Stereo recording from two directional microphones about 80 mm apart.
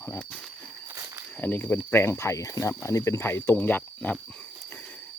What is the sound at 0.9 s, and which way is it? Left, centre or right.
Cricket, right.